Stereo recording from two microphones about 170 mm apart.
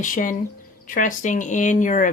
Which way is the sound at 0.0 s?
50° left (ahead or behind).